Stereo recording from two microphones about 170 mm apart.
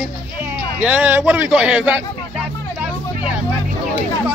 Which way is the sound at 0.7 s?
10° right (ahead or behind).